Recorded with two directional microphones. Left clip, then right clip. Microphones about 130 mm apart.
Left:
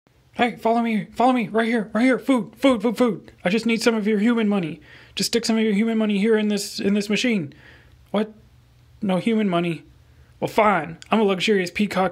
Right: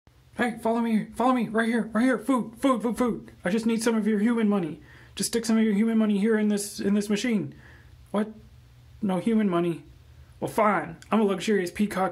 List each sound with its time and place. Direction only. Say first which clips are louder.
0.3 s speech: left 6 dB; 15° left (ahead or behind)